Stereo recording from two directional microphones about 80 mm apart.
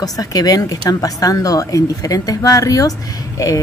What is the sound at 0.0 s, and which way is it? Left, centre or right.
Speech, left.